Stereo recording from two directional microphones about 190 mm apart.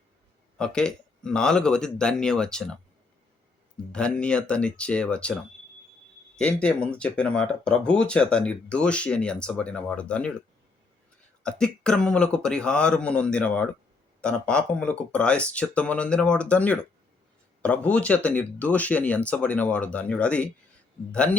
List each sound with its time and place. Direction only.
0.6 s speech: 5° left (ahead or behind)
3.9 s speech: 5° left (ahead or behind)
11.4 s speech: 5° left (ahead or behind)